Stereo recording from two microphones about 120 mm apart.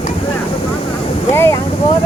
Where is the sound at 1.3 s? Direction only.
20° left (ahead or behind).